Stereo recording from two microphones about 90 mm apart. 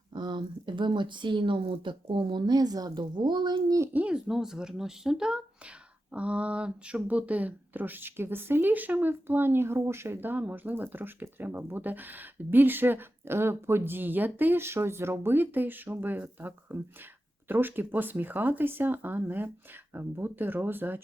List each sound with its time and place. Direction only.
0.1 s speech: 60° right (ahead or behind)
3.9 s speech: 10° right (ahead or behind)